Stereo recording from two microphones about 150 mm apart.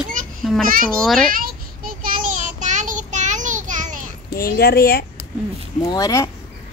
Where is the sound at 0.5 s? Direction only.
Centre (ahead or behind).